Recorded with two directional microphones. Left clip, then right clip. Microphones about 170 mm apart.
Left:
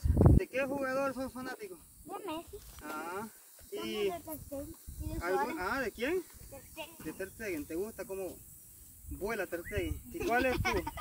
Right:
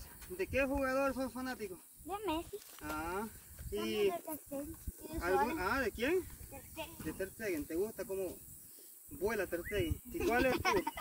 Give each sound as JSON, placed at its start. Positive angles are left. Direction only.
{"t": 0.0, "sound": "speech", "side_deg": 0}
{"t": 2.0, "sound": "speech", "side_deg": -55}
{"t": 2.8, "sound": "speech", "side_deg": 5}
{"t": 3.8, "sound": "speech", "side_deg": 15}
{"t": 4.1, "sound": "speech", "side_deg": -30}
{"t": 5.1, "sound": "speech", "side_deg": 10}
{"t": 6.5, "sound": "speech", "side_deg": -15}
{"t": 7.1, "sound": "speech", "side_deg": 30}
{"t": 10.1, "sound": "speech", "side_deg": 20}